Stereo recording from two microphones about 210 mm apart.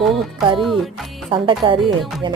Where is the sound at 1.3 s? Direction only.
25° right (ahead or behind).